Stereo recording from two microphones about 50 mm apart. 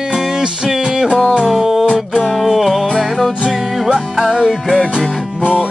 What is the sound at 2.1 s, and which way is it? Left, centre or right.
Music, centre.